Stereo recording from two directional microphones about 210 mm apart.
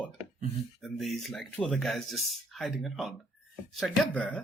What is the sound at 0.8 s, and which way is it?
Speech, centre (ahead or behind).